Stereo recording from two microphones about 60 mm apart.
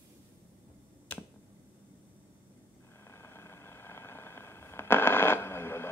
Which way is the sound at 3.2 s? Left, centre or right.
Left.